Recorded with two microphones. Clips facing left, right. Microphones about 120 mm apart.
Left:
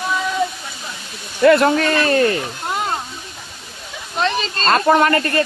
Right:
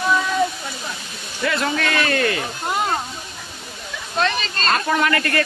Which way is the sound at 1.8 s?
35° left (ahead or behind).